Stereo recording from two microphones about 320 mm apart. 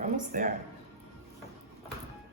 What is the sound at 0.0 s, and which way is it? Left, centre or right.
Speech, right.